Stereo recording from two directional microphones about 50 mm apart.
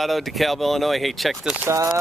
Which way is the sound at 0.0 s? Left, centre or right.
Centre.